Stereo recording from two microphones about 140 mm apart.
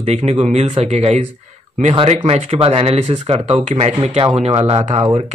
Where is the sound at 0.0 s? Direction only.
50° right (ahead or behind).